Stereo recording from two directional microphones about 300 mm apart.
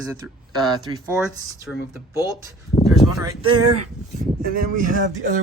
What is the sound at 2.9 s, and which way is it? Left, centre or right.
Speech, centre.